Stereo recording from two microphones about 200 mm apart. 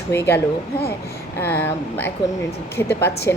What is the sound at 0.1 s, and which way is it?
Speech, 10° left (ahead or behind).